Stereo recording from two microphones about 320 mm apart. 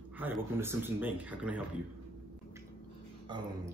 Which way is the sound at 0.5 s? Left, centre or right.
Centre.